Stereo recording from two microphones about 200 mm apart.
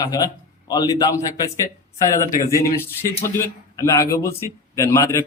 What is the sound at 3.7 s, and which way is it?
A man's voice, 15° left (ahead or behind).